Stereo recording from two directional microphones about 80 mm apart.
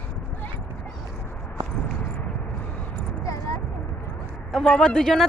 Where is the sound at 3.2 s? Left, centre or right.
Left.